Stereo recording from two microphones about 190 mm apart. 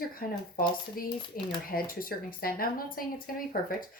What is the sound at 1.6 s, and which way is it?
Speech, 50° left (ahead or behind).